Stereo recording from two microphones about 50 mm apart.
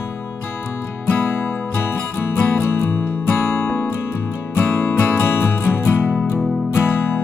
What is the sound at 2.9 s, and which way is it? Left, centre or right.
Music, left.